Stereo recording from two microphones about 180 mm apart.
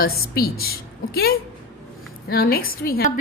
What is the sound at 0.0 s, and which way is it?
A woman's voice, 60° left (ahead or behind).